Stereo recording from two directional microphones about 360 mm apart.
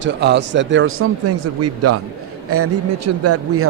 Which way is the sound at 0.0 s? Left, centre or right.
Right.